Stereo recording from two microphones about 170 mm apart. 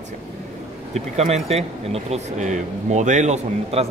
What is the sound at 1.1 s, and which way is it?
Speech, 40° right (ahead or behind).